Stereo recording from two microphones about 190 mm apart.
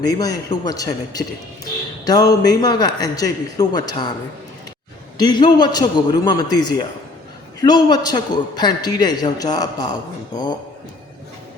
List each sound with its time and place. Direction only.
0.0 s a man's voice: 20° left (ahead or behind)
5.2 s a man's voice: 20° left (ahead or behind)